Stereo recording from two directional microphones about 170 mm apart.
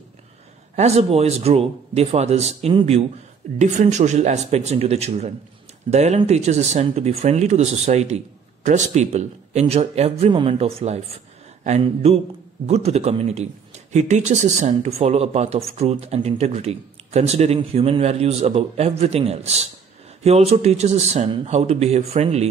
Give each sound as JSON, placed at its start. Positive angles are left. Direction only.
{"t": 0.7, "sound": "speech", "side_deg": -40}